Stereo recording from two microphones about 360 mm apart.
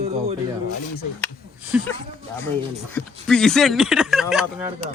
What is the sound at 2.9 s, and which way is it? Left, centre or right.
Speech, centre.